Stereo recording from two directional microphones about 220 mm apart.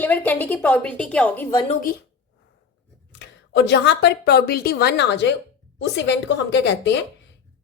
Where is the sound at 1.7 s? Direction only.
40° left (ahead or behind).